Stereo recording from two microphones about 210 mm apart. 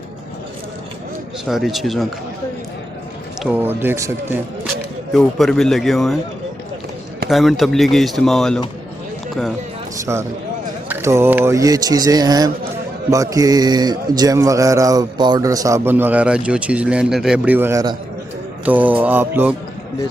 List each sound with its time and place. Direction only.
1.5 s speech: centre (ahead or behind)
3.4 s a man's voice: 10° right (ahead or behind)
5.1 s speech: centre (ahead or behind)
7.3 s speech: centre (ahead or behind)
10.0 s a man's voice: 15° right (ahead or behind)